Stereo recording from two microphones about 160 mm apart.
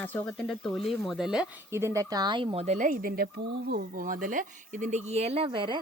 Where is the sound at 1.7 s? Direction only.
15° right (ahead or behind).